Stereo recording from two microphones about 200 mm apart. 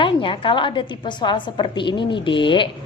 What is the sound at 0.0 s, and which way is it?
A woman's voice, 25° left (ahead or behind).